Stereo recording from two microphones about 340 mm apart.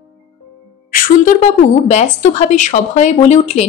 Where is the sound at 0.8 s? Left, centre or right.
Left.